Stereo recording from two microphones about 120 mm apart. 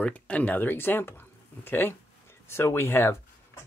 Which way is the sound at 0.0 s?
10° left (ahead or behind).